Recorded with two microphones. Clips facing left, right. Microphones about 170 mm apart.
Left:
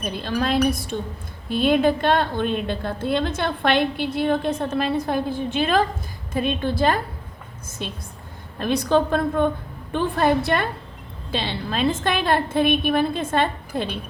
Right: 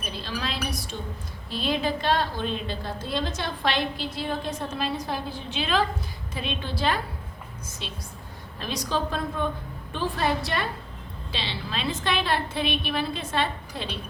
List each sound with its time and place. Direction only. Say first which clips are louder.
0.0 s a woman's voice: left 8 dB; 50° left (ahead or behind)